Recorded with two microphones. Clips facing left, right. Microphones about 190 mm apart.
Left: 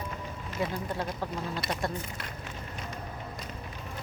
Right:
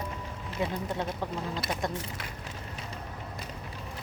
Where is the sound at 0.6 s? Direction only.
20° right (ahead or behind).